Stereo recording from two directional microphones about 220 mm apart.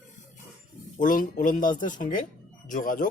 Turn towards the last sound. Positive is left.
turn(degrees=40)  # may be behind; listen again after turning